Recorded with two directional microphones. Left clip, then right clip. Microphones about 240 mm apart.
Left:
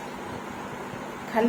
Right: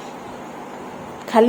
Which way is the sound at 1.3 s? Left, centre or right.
Right.